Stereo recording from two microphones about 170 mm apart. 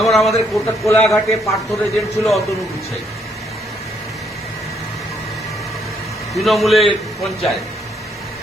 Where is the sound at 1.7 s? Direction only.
Centre (ahead or behind).